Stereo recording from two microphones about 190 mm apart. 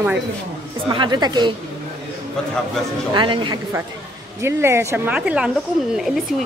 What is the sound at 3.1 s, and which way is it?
Speech, 25° right (ahead or behind).